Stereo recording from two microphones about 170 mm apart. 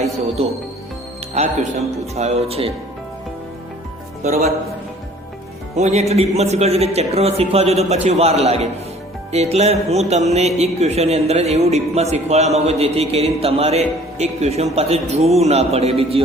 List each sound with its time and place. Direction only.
0.4 s a man's voice: 35° right (ahead or behind)
5.7 s a man's voice: 40° right (ahead or behind)